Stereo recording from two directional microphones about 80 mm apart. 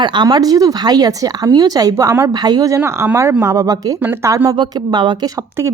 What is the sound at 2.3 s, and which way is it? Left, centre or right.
Speech, right.